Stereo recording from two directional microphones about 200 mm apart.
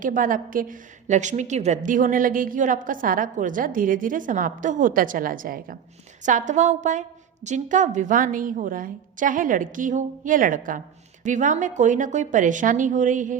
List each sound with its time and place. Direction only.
0.0 s a woman's voice: 40° right (ahead or behind)